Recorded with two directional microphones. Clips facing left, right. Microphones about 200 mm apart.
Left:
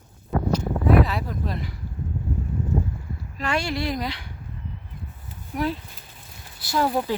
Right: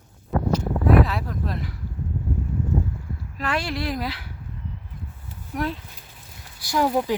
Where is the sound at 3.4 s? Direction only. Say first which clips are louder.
Left 1 dB; centre (ahead or behind).